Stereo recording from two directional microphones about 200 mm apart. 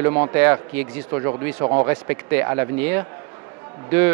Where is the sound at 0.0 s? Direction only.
15° right (ahead or behind).